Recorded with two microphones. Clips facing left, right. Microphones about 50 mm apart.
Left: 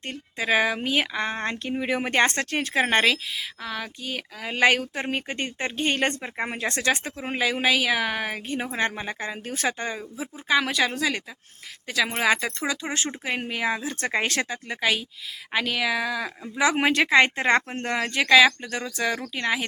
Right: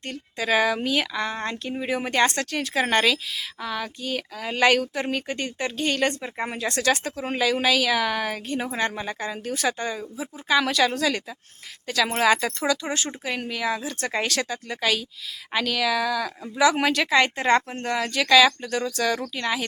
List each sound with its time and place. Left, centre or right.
0.0 s speech: left
2.8 s speech: left
3.6 s speech: centre
4.9 s speech: left
6.3 s speech: left
10.5 s speech: centre